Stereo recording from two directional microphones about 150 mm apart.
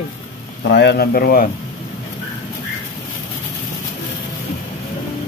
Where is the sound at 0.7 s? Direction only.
90° left.